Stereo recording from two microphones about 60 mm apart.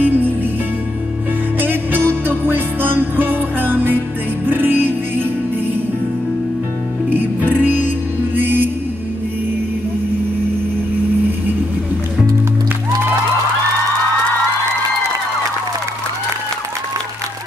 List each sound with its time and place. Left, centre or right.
0.0 s music: right
1.6 s music: right
7.1 s music: right